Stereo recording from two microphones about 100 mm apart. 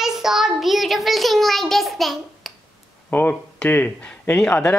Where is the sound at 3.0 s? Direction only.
15° left (ahead or behind).